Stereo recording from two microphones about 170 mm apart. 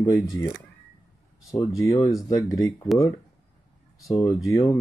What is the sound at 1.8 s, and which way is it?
Speech, 20° left (ahead or behind).